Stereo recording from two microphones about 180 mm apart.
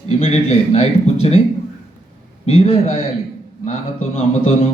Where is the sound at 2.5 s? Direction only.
35° left (ahead or behind).